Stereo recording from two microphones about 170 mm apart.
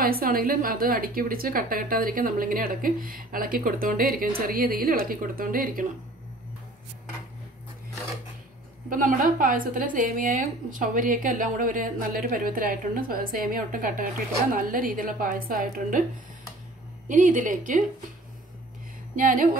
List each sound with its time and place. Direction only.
0.0 s a woman's voice: 60° right (ahead or behind)
8.9 s a woman's voice: 55° right (ahead or behind)
17.1 s speech: 50° right (ahead or behind)
19.1 s speech: 50° right (ahead or behind)